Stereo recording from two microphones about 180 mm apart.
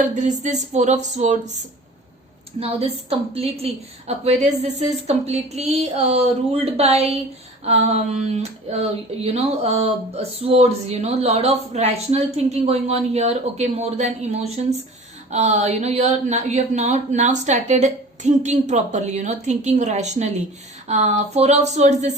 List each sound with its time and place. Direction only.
0.0 s speech: 45° right (ahead or behind)
2.6 s speech: 35° right (ahead or behind)